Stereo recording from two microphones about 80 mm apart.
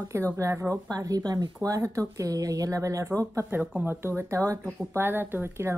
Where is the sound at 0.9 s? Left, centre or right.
Right.